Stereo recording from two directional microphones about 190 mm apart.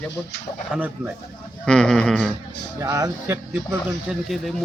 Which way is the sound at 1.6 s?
5° left (ahead or behind).